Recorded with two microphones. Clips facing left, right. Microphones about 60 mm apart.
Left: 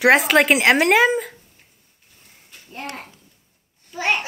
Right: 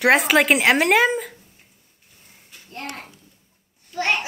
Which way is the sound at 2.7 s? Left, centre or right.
Centre.